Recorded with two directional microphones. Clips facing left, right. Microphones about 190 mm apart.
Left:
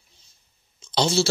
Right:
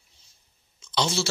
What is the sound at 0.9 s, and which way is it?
Speech, 35° left (ahead or behind).